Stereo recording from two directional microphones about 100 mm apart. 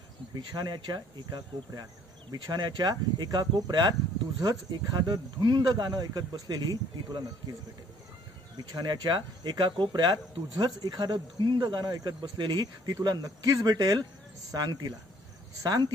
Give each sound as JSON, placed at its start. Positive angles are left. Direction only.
{"t": 0.3, "sound": "speech", "side_deg": -45}
{"t": 8.5, "sound": "speech", "side_deg": -45}